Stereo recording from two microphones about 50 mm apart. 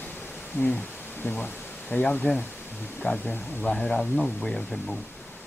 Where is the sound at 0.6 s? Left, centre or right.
Left.